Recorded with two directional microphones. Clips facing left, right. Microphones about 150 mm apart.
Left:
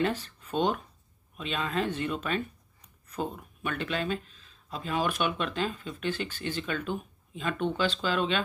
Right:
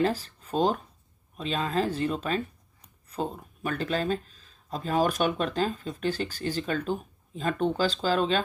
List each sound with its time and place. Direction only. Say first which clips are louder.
0.0 s speech: right 3 dB; 35° right (ahead or behind)